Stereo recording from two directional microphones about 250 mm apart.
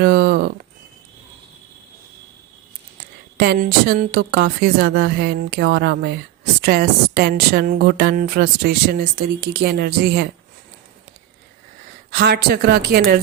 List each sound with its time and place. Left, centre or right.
0.0 s speech: right
3.3 s a woman's voice: right
12.1 s a woman's voice: right